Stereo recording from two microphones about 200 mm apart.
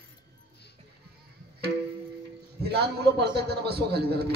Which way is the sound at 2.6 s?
55° right (ahead or behind).